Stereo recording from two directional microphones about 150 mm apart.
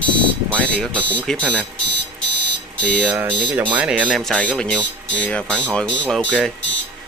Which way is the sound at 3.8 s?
5° right (ahead or behind).